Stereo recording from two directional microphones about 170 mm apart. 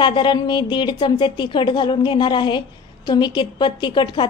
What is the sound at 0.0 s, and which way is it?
A woman's voice, 25° left (ahead or behind).